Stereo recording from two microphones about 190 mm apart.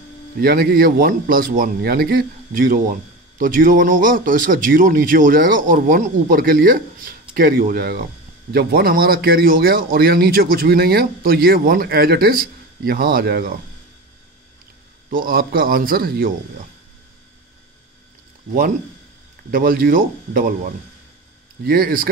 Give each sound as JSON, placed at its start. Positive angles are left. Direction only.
{"t": 0.4, "sound": "speech", "side_deg": -50}
{"t": 15.0, "sound": "speech", "side_deg": -50}
{"t": 19.5, "sound": "speech", "side_deg": -50}